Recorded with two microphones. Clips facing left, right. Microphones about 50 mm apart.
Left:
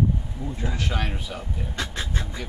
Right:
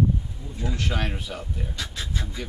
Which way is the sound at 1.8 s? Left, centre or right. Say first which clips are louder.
Left 5 dB; left.